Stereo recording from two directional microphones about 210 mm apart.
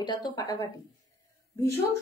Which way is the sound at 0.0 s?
20° left (ahead or behind).